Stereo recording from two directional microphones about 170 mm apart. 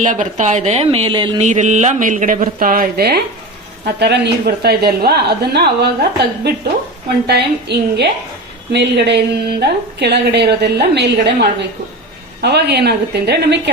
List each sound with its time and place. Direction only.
0.0 s a woman's voice: 45° right (ahead or behind); by 1.4 s 30° right (ahead or behind)
1.4 s speech: 45° right (ahead or behind); by 3.2 s 65° right (ahead or behind)
3.8 s a woman's voice: 75° right (ahead or behind)
8.7 s a woman's voice: 90° right; by 13.6 s 75° right (ahead or behind)